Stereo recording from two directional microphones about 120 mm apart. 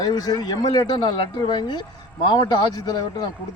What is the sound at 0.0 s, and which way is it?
Speech, 35° left (ahead or behind).